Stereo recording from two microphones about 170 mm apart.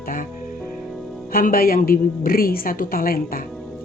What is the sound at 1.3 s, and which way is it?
A woman's voice, 55° left (ahead or behind).